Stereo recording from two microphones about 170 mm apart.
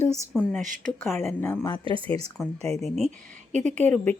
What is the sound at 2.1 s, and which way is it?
Speech, 40° right (ahead or behind).